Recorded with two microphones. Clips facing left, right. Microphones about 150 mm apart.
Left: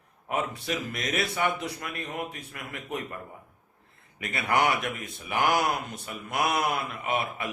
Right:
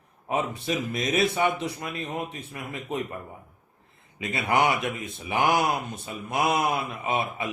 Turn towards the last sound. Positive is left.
turn(degrees=-20)  # may be behind; listen again after turning